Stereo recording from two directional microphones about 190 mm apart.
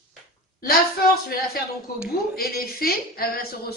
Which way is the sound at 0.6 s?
50° left (ahead or behind).